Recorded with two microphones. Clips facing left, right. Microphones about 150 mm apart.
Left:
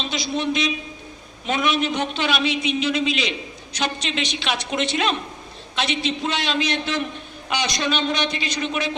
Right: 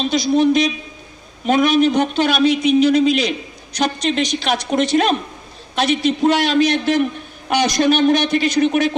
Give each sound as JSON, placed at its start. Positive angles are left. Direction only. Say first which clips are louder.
{"t": 0.0, "sound": "a man's voice", "louder": "right 10 dB", "side_deg": -45}